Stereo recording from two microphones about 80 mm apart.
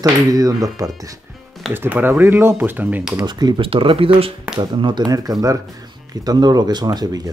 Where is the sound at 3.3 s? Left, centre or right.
Right.